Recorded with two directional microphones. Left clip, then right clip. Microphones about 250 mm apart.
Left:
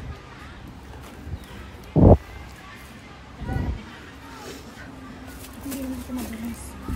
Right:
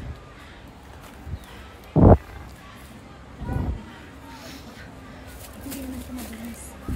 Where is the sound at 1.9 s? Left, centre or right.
Left.